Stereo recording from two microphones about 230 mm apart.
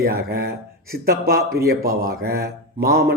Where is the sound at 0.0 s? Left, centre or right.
Right.